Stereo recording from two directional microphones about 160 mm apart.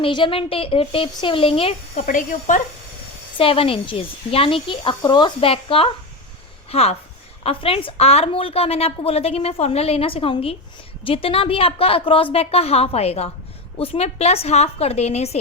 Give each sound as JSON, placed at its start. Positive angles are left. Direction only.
{"t": 0.0, "sound": "a woman's voice", "side_deg": 30}
{"t": 2.0, "sound": "speech", "side_deg": 55}
{"t": 3.3, "sound": "a woman's voice", "side_deg": 35}